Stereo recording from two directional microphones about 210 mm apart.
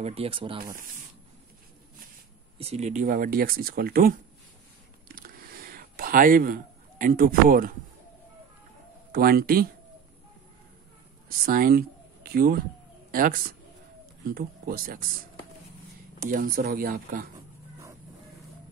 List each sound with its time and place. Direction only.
0.0 s speech: 30° right (ahead or behind)
2.6 s speech: 30° right (ahead or behind)
5.0 s a sound: 45° right (ahead or behind)
9.1 s speech: 45° right (ahead or behind)
11.2 s speech: 45° right (ahead or behind)
16.2 s speech: 40° right (ahead or behind)